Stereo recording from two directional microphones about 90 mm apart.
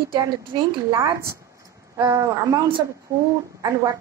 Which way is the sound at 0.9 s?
35° right (ahead or behind).